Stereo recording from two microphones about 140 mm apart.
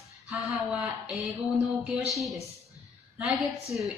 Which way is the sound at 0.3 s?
10° right (ahead or behind).